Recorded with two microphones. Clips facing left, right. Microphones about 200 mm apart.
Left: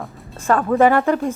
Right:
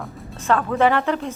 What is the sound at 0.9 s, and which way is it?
Speech, 45° left (ahead or behind).